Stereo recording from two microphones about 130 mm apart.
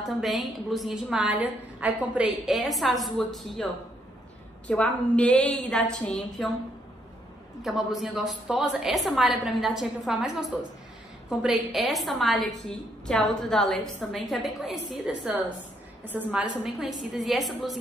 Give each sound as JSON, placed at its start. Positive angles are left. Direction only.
{"t": 0.0, "sound": "a woman's voice", "side_deg": 0}
{"t": 4.6, "sound": "a woman's voice", "side_deg": 10}
{"t": 7.6, "sound": "a woman's voice", "side_deg": 0}
{"t": 16.0, "sound": "a woman's voice", "side_deg": -15}